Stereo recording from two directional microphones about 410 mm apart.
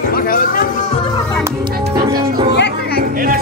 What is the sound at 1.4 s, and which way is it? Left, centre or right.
Speech, centre.